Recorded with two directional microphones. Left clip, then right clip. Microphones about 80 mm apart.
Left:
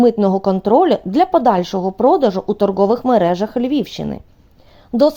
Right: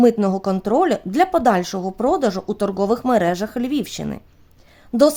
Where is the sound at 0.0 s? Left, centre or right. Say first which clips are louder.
Left 3 dB; left.